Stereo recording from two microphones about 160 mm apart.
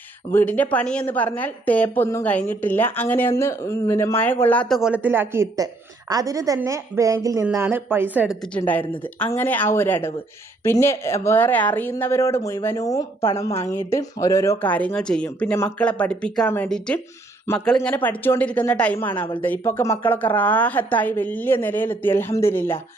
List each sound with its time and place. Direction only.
0.3 s speech: 10° left (ahead or behind)
4.7 s a woman's voice: 5° right (ahead or behind)
8.4 s speech: 10° left (ahead or behind)